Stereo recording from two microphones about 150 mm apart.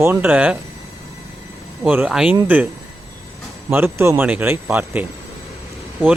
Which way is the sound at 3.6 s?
15° right (ahead or behind).